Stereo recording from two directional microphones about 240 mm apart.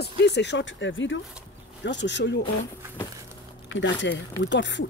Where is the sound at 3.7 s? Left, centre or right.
Left.